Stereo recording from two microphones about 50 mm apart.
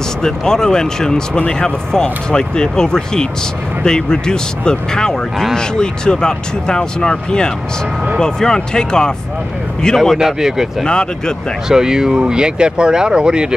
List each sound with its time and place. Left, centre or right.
0.2 s speech: centre
10.1 s speech: centre
10.9 s speech: centre
11.7 s speech: centre